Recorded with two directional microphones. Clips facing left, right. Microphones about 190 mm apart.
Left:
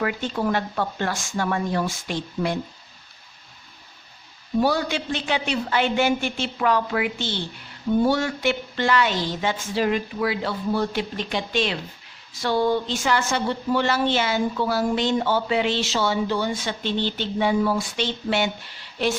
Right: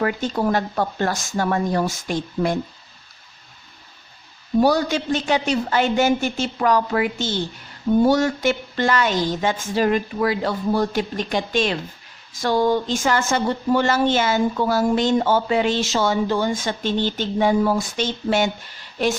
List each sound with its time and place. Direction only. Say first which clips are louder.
0.0 s speech: right 3 dB; 40° right (ahead or behind)
4.6 s speech: right 4 dB; 40° right (ahead or behind)